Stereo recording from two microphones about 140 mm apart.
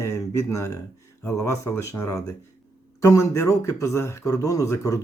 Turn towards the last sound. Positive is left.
turn(degrees=25)  # may be behind; listen again after turning